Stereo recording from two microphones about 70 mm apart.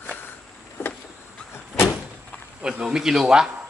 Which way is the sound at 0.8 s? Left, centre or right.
Left.